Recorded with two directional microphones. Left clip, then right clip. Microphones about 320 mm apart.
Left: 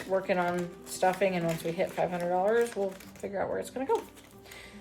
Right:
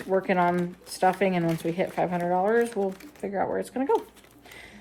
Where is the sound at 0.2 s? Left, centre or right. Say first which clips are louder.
Right 7 dB; right.